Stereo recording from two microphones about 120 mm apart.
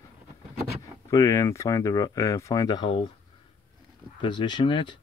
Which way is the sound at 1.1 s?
25° left (ahead or behind).